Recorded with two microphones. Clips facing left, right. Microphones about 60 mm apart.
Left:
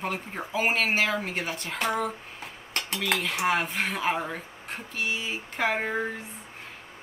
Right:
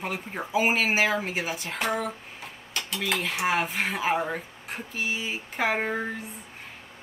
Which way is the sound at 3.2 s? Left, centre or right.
Centre.